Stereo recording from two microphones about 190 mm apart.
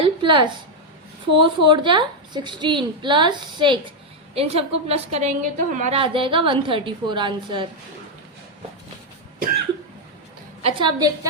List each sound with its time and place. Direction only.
0.0 s a sound: 25° right (ahead or behind)
1.3 s a woman's voice: 25° right (ahead or behind)
10.6 s a woman's voice: 30° right (ahead or behind)